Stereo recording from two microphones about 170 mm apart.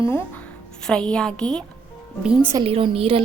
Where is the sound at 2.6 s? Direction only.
35° right (ahead or behind).